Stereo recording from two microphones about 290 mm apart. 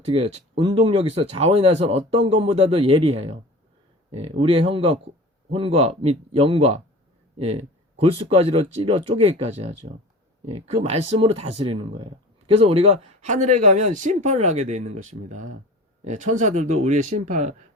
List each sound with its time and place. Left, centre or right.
0.0 s speech: centre